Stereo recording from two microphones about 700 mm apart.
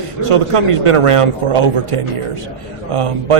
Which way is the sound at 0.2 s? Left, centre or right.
Right.